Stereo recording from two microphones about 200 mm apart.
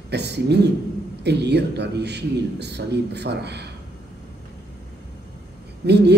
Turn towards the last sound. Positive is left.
turn(degrees=-55)  # may be behind; listen again after turning